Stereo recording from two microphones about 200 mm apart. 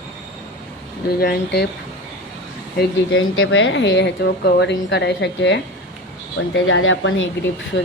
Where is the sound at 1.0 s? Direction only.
50° left (ahead or behind).